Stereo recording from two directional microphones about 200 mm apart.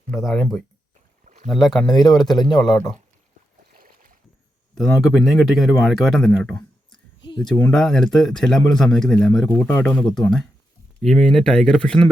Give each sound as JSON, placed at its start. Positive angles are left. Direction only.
{"t": 0.1, "sound": "speech", "side_deg": 0}
{"t": 1.2, "sound": "rowboat", "side_deg": -40}
{"t": 1.5, "sound": "speech", "side_deg": 0}
{"t": 4.7, "sound": "speech", "side_deg": 0}